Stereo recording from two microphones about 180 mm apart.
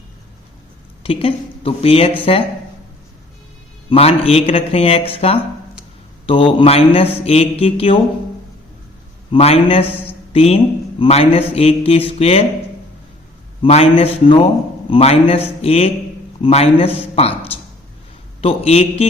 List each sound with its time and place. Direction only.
1.0 s a man's voice: 30° left (ahead or behind)
3.8 s a man's voice: 35° left (ahead or behind)
9.3 s a man's voice: 30° left (ahead or behind)
13.6 s a man's voice: 30° left (ahead or behind)